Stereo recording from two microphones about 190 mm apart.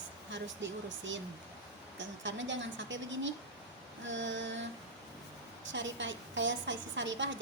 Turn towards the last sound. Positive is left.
turn(degrees=-75)  # may be behind; listen again after turning